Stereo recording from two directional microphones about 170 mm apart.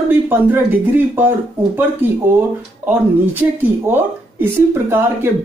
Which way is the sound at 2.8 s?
10° right (ahead or behind).